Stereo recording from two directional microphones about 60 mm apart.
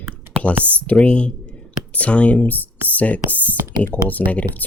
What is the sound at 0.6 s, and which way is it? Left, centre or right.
Speech, left.